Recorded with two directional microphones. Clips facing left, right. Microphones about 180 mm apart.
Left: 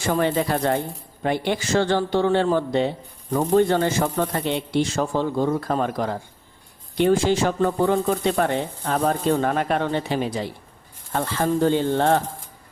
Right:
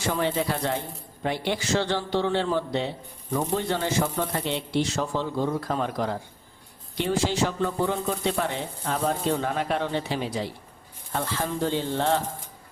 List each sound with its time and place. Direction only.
0.1 s speech: 50° left (ahead or behind)